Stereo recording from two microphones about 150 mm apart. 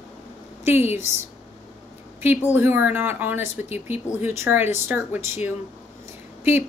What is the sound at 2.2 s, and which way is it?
Speech, 15° right (ahead or behind).